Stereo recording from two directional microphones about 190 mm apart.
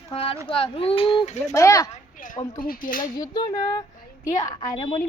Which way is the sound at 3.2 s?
20° left (ahead or behind).